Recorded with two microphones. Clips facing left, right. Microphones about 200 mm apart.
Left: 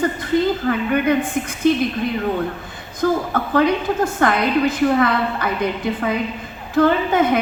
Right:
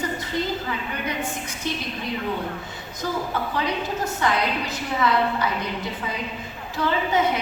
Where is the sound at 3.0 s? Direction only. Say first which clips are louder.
Left 8 dB; 55° left (ahead or behind).